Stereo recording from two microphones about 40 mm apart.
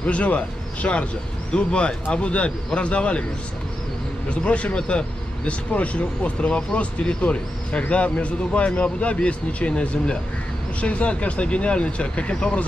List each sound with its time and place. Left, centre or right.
0.0 s speech: left
1.5 s speech: left
4.3 s speech: left